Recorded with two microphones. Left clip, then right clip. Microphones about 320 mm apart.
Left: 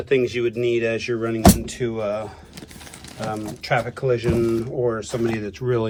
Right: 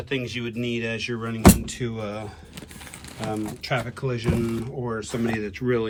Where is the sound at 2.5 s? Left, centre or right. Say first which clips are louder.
Left 1 dB; right.